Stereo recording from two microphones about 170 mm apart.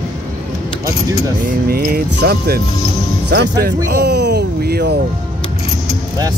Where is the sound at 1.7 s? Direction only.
60° right (ahead or behind).